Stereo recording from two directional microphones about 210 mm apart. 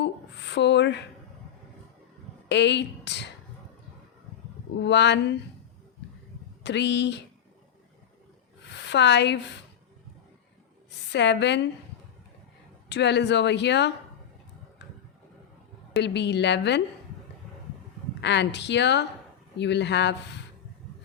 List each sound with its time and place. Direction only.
0.0 s a sound: 55° left (ahead or behind)
2.5 s a woman's voice: 55° left (ahead or behind)
4.8 s speech: 55° left (ahead or behind)
6.6 s speech: 55° left (ahead or behind)
8.7 s speech: 55° left (ahead or behind)
11.1 s speech: 55° left (ahead or behind)
12.9 s speech: 55° left (ahead or behind)
16.0 s speech: 55° left (ahead or behind)
18.2 s speech: 55° left (ahead or behind)